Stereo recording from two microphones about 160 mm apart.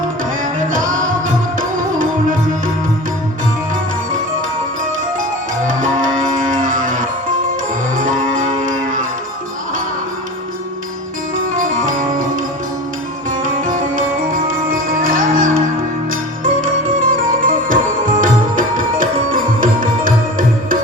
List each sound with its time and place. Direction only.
0.7 s music: 60° right (ahead or behind)
5.6 s music: 55° right (ahead or behind)
11.5 s music: 55° right (ahead or behind)
14.7 s music: 60° right (ahead or behind)
17.0 s music: 60° right (ahead or behind)